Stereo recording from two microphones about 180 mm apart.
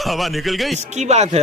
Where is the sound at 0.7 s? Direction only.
40° right (ahead or behind).